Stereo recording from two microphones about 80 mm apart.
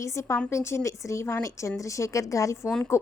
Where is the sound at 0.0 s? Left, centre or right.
Left.